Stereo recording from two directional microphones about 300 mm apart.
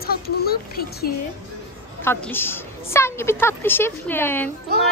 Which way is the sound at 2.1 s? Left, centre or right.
Centre.